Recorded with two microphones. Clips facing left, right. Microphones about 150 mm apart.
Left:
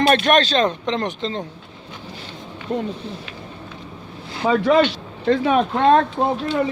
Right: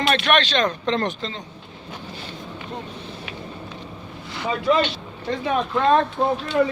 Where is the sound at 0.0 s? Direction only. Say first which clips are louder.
Left 4 dB; 40° left (ahead or behind).